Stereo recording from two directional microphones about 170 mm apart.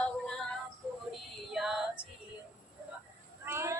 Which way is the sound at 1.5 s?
Centre (ahead or behind).